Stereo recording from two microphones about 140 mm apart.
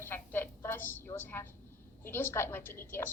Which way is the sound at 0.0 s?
15° left (ahead or behind).